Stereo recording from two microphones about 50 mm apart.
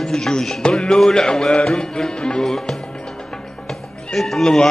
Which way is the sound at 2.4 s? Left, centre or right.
Centre.